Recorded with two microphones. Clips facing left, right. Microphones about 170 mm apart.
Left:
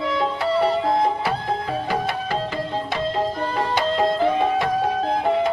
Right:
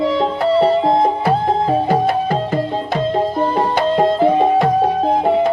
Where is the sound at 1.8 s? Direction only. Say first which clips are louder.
Right 9 dB; 50° right (ahead or behind).